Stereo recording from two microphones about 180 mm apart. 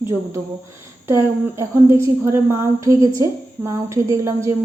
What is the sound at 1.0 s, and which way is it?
A woman's voice, 15° right (ahead or behind).